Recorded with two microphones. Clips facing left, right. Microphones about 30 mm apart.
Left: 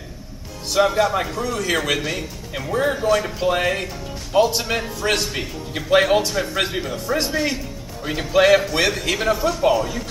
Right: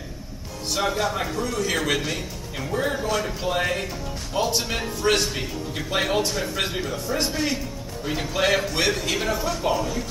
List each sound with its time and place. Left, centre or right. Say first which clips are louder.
0.7 s speech: left 7 dB; centre